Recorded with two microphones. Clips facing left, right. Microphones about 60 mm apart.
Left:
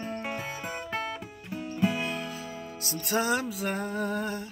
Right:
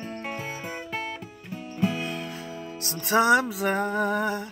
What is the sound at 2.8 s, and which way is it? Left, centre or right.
Music, right.